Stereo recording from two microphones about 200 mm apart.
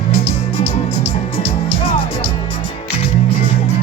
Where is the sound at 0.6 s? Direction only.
25° left (ahead or behind).